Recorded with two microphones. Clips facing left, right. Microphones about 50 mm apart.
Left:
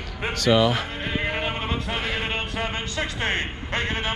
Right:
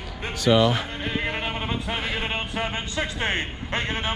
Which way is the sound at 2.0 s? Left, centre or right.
Centre.